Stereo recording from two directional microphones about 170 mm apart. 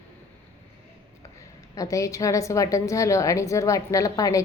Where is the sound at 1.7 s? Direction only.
20° left (ahead or behind).